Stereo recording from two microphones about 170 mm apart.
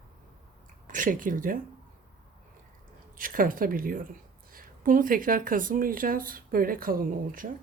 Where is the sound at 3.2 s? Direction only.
55° right (ahead or behind).